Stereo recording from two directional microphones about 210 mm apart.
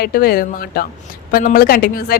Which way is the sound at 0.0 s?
45° left (ahead or behind).